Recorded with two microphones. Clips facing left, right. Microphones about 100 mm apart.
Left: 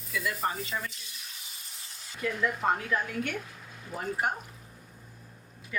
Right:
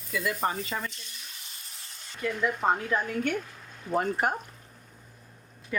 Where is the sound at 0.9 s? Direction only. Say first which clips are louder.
Right 1 dB; centre (ahead or behind).